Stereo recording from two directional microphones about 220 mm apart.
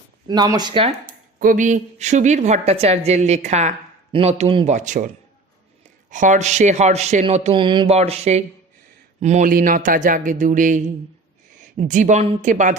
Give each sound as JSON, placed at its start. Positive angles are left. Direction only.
{"t": 0.3, "sound": "speech", "side_deg": -15}
{"t": 1.4, "sound": "a woman's voice", "side_deg": -35}